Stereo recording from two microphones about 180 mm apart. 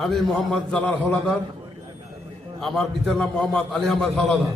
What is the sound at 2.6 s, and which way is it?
A man's voice, centre (ahead or behind).